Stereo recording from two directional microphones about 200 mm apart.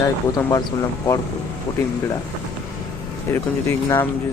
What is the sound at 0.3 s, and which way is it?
Speech, 15° left (ahead or behind).